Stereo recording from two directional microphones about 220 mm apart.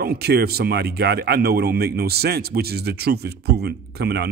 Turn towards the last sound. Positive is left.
turn(degrees=-45)  # may be behind; listen again after turning